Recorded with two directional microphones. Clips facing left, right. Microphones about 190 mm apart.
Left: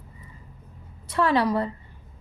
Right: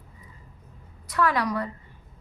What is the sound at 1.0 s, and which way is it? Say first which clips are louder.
Speech: left 3 dB; 25° left (ahead or behind).